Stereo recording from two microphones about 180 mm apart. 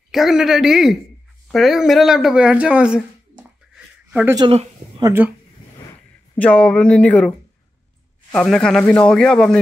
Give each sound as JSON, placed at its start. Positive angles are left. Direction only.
{"t": 0.1, "sound": "speech", "side_deg": 0}
{"t": 4.4, "sound": "speech", "side_deg": -30}
{"t": 5.0, "sound": "speech", "side_deg": -10}
{"t": 6.3, "sound": "speech", "side_deg": 5}